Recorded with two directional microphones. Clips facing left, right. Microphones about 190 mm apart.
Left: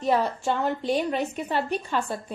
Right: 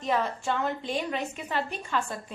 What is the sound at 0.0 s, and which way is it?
A woman's voice, 35° left (ahead or behind).